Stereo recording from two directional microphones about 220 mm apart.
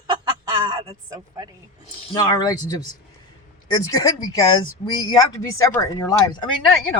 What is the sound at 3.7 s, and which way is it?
Speech, 20° left (ahead or behind).